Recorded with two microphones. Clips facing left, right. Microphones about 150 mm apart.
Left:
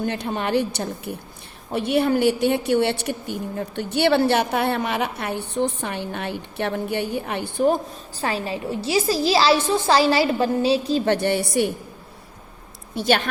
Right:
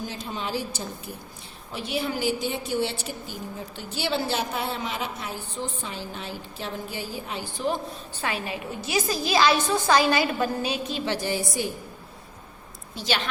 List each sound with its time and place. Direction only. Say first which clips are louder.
0.0 s a woman's voice: left 8 dB; 65° left (ahead or behind); by 11.0 s 35° left (ahead or behind)
11.0 s a woman's voice: left 7 dB; 60° left (ahead or behind)
13.0 s a woman's voice: left 7 dB; 55° left (ahead or behind)